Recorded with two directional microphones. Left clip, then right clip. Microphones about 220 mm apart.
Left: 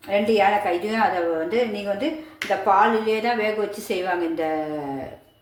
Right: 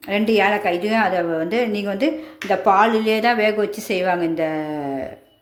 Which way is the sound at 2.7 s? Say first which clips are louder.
Right 2 dB; 50° right (ahead or behind).